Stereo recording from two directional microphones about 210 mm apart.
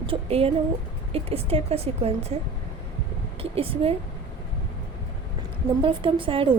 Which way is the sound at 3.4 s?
25° right (ahead or behind).